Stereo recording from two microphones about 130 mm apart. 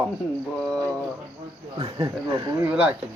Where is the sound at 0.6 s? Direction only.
5° left (ahead or behind).